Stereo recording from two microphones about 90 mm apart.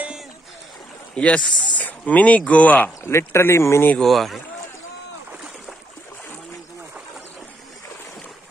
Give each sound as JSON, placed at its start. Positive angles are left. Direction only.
{"t": 1.1, "sound": "speech", "side_deg": 15}
{"t": 3.0, "sound": "speech", "side_deg": 30}
{"t": 4.0, "sound": "speech", "side_deg": 0}